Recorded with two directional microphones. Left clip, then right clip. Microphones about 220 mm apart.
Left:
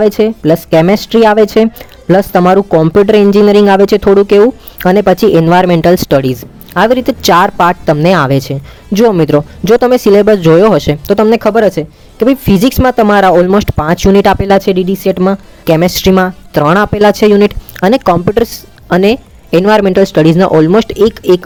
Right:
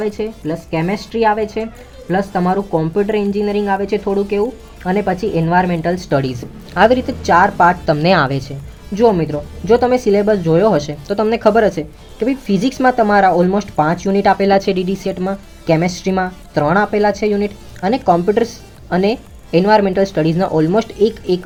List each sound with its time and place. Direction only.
0.0 s speech: 55° left (ahead or behind); by 7.0 s 30° left (ahead or behind)
7.1 s speech: 45° left (ahead or behind)
7.9 s speech: 25° left (ahead or behind)
9.0 s speech: 50° left (ahead or behind)